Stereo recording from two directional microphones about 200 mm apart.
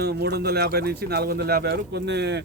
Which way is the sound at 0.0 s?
55° right (ahead or behind).